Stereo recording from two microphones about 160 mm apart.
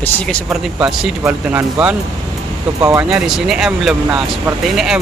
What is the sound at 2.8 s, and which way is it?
Speech, 20° right (ahead or behind).